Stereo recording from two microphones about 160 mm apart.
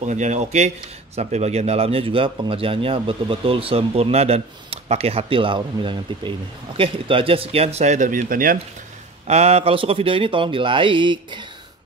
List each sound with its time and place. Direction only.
0.0 s a man's voice: 50° right (ahead or behind)
9.3 s a man's voice: 40° right (ahead or behind)